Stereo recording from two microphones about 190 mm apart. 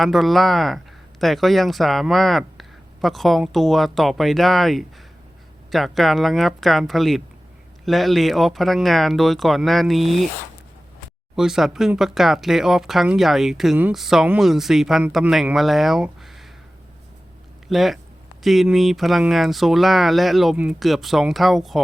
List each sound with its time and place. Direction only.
0.0 s speech: centre (ahead or behind)
11.3 s speech: centre (ahead or behind)
17.7 s speech: centre (ahead or behind)